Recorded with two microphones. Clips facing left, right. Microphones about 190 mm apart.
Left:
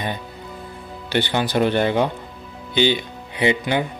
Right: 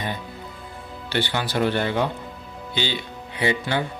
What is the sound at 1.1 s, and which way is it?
Speech, 20° left (ahead or behind).